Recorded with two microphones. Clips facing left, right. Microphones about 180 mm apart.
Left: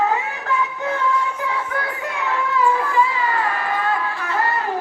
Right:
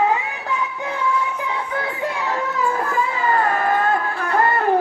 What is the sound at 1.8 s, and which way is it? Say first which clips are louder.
Children playing: right 2 dB; 35° right (ahead or behind).